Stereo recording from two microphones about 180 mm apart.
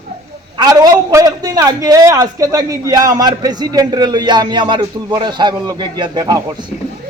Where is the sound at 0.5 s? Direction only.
20° right (ahead or behind).